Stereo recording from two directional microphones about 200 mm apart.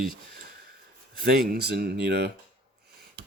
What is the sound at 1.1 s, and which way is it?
Speech, 50° right (ahead or behind).